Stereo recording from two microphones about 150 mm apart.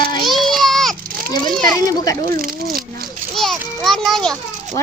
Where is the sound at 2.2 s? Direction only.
75° right (ahead or behind).